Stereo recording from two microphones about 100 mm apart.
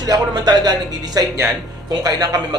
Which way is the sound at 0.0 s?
45° right (ahead or behind).